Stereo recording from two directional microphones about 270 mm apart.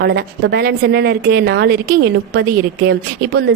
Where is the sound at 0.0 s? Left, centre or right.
Right.